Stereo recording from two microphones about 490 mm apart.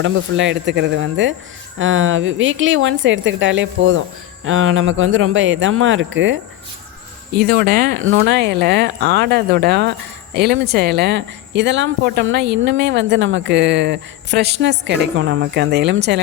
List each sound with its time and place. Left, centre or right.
0.0 s speech: right